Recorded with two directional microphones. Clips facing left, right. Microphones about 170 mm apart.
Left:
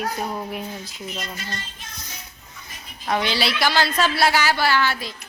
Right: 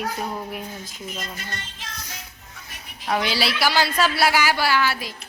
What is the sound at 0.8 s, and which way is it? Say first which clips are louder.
Speech: left 1 dB; 45° right (ahead or behind).